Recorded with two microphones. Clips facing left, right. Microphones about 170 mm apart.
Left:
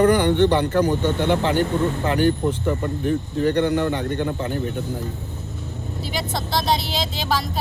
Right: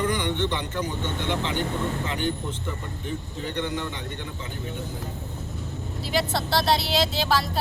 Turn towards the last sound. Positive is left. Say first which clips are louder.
# right 1 dB
turn(degrees=0)  # may be behind; listen again after turning